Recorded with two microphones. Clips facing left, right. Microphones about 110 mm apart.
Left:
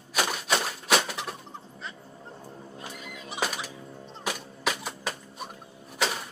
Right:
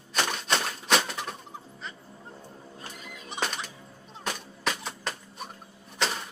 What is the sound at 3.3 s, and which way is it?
Music, 5° left (ahead or behind).